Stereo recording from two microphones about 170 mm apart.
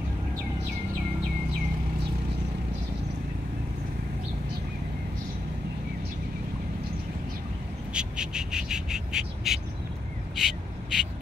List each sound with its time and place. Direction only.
7.9 s bird: 5° right (ahead or behind)
10.3 s duck: centre (ahead or behind)